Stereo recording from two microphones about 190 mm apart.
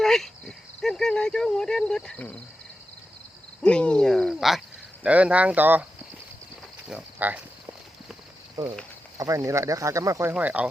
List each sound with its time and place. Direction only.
0.0 s cricket: centre (ahead or behind)
3.6 s a sound: 5° left (ahead or behind)
5.0 s speech: 5° right (ahead or behind)
6.8 s speech: 5° right (ahead or behind)
9.1 s speech: 20° right (ahead or behind)